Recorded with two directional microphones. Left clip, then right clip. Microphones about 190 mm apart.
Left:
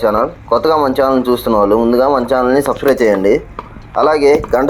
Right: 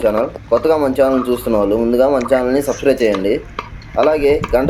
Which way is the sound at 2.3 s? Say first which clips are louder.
Left 2 dB; 15° left (ahead or behind).